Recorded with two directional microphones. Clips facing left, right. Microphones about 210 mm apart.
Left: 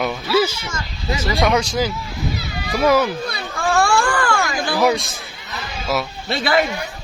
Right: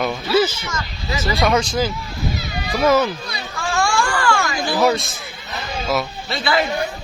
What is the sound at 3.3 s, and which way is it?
Baby cry, 55° left (ahead or behind).